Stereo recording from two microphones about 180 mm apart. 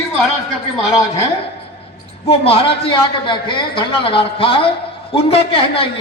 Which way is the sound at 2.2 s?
30° left (ahead or behind).